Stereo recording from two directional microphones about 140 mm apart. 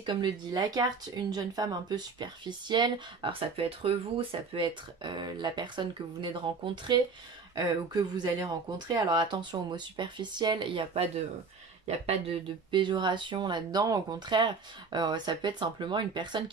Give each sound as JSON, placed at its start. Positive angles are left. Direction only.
{"t": 0.0, "sound": "speech", "side_deg": -35}
{"t": 12.7, "sound": "speech", "side_deg": -35}